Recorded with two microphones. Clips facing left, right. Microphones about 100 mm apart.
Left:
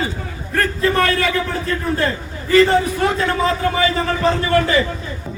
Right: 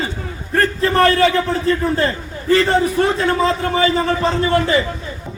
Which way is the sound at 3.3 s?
30° right (ahead or behind).